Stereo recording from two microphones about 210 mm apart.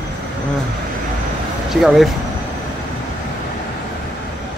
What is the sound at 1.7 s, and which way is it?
Speech, centre (ahead or behind).